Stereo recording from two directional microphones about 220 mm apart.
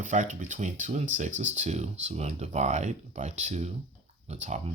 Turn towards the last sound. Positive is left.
turn(degrees=-30)  # may be behind; listen again after turning